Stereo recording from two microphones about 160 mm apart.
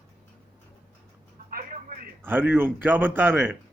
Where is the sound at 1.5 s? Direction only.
60° right (ahead or behind).